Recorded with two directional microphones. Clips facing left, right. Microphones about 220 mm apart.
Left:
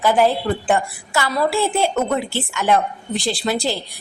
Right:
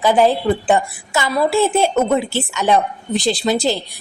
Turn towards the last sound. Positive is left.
turn(degrees=-20)  # may be behind; listen again after turning